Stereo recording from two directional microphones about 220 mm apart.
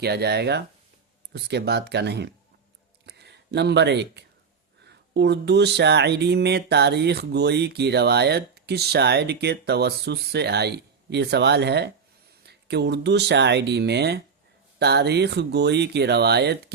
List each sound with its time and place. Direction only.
0.0 s speech: 45° right (ahead or behind)